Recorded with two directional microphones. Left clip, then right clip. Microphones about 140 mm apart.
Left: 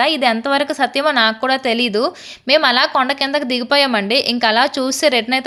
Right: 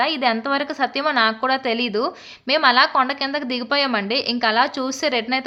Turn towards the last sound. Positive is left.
turn(degrees=35)  # may be behind; listen again after turning